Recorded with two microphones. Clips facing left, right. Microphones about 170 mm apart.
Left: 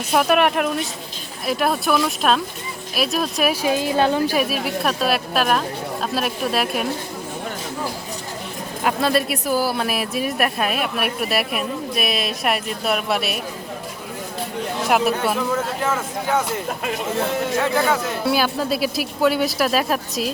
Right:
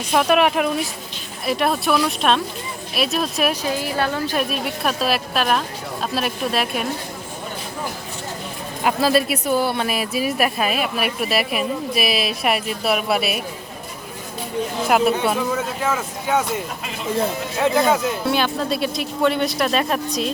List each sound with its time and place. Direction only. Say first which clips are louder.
0.1 s speech: even; centre (ahead or behind)
3.7 s a woman's voice: left 4 dB; 20° left (ahead or behind)
4.3 s speech: left 2 dB; 5° left (ahead or behind)
8.8 s speech: right 2 dB; centre (ahead or behind)
14.8 s speech: right 1 dB; centre (ahead or behind)
17.2 s speech: even; 15° right (ahead or behind)
18.3 s speech: left 2 dB; 5° left (ahead or behind)